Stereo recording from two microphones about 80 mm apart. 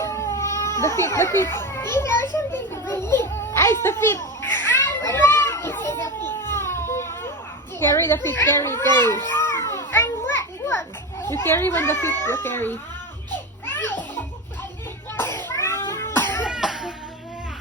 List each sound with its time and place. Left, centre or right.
0.0 s a child's voice: left
6.2 s baby cry: left
7.8 s a child's voice: left
9.3 s children playing: left
12.2 s speech: left
13.7 s music: left
15.1 s children playing: left
15.5 s cat: left
15.9 s cough: left
16.4 s cough: centre